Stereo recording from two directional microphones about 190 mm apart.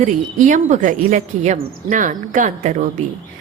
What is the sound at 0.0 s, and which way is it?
A woman's voice, 40° right (ahead or behind).